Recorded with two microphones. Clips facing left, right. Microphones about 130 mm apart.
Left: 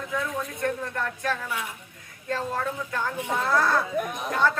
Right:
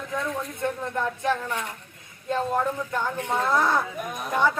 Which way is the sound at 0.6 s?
20° right (ahead or behind).